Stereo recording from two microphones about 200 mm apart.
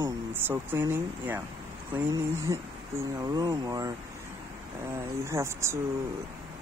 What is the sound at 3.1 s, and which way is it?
Speech, 20° right (ahead or behind).